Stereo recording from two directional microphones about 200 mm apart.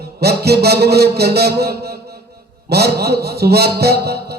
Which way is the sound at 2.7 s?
55° right (ahead or behind).